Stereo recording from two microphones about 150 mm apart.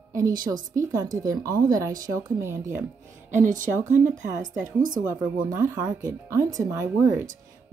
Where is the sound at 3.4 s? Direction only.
60° right (ahead or behind).